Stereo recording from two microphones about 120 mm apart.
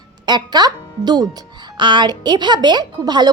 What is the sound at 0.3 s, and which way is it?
A woman's voice, 35° right (ahead or behind).